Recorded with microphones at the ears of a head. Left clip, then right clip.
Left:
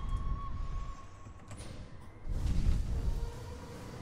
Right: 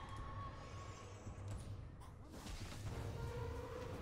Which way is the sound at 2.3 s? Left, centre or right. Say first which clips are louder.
Left 9 dB; left.